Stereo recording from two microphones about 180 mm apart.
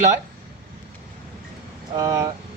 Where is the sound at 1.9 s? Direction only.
20° right (ahead or behind).